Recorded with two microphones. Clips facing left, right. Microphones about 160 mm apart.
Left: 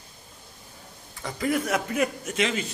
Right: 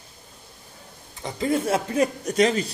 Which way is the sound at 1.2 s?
25° right (ahead or behind).